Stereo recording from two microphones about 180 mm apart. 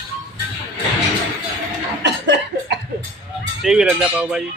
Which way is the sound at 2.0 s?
75° right (ahead or behind).